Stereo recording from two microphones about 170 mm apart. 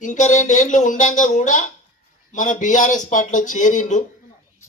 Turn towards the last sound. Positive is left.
turn(degrees=50)  # may be behind; listen again after turning